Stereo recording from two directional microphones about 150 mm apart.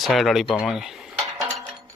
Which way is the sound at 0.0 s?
Centre (ahead or behind).